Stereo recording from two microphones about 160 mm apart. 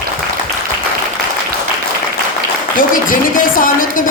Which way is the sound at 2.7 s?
60° left (ahead or behind).